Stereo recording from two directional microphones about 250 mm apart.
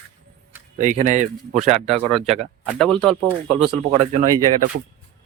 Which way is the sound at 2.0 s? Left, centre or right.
Centre.